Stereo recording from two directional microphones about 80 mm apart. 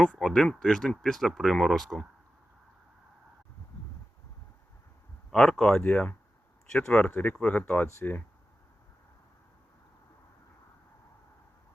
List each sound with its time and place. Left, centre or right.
0.0 s speech: centre
5.3 s speech: centre
5.8 s speech: centre